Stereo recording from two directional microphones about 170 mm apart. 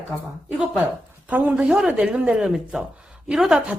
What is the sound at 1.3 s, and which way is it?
Speech, 10° right (ahead or behind).